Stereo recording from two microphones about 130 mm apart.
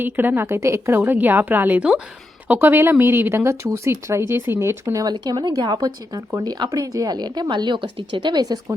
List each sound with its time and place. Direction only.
0.0 s a woman's voice: 15° right (ahead or behind)